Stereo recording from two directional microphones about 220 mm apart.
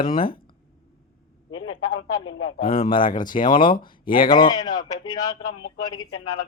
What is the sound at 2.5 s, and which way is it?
Speech, 25° left (ahead or behind).